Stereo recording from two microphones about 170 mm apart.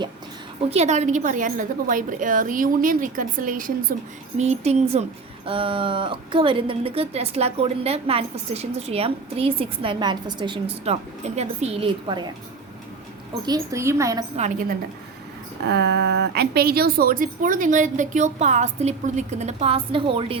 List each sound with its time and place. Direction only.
0.7 s a woman's voice: 40° right (ahead or behind)
4.4 s a woman's voice: 40° right (ahead or behind)
13.4 s a woman's voice: 20° right (ahead or behind)
14.3 s a woman's voice: 45° right (ahead or behind)
15.6 s a woman's voice: 80° right; by 20.4 s 30° right (ahead or behind)